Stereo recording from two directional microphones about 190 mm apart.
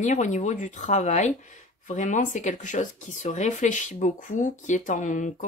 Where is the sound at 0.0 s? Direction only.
40° left (ahead or behind).